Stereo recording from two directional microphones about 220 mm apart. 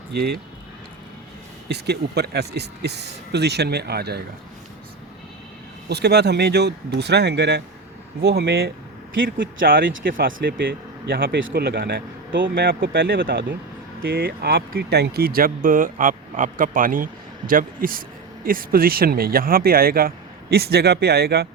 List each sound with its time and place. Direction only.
0.1 s speech: 45° right (ahead or behind)
1.6 s speech: 50° right (ahead or behind)
5.9 s speech: 50° right (ahead or behind)
10.1 s speech: 40° right (ahead or behind)